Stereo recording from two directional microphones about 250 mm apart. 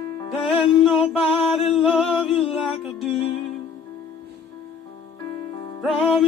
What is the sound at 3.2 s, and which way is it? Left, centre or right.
Music, left.